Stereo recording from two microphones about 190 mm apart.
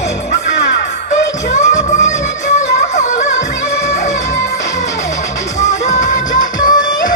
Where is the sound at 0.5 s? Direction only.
65° left (ahead or behind).